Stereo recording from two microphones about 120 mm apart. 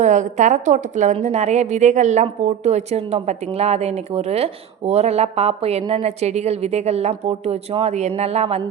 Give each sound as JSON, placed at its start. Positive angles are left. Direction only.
{"t": 0.0, "sound": "a woman's voice", "side_deg": -90}
{"t": 2.4, "sound": "a woman's voice", "side_deg": -65}